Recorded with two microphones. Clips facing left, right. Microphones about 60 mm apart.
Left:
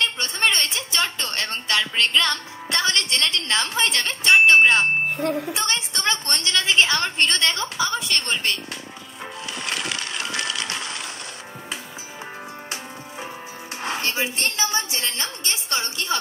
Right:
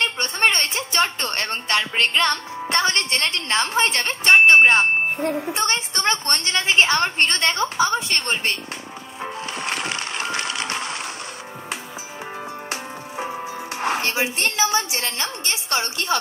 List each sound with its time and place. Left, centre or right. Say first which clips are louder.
0.0 s a woman's voice: right 2 dB; right
9.5 s music: right 1 dB; right
13.2 s music: right 8 dB; right
15.0 s a woman's voice: right 2 dB; right